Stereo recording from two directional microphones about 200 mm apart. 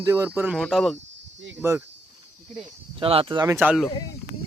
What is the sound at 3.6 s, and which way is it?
Speech, 5° right (ahead or behind).